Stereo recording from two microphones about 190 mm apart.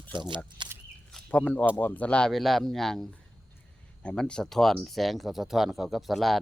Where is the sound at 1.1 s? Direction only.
10° left (ahead or behind).